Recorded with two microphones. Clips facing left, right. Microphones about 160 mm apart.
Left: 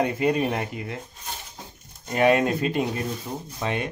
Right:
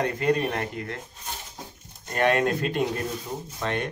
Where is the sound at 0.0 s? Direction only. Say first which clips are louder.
Left 2 dB; 10° left (ahead or behind).